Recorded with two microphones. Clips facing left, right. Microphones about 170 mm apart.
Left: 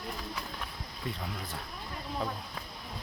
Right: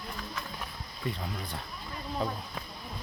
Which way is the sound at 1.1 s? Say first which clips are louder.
Right 2 dB; centre (ahead or behind).